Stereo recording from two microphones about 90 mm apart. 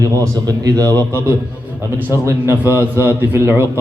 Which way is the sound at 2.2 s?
25° right (ahead or behind).